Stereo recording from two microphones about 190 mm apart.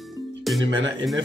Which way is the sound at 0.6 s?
75° right (ahead or behind).